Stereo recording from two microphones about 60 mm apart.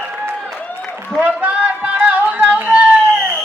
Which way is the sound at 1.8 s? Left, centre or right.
Right.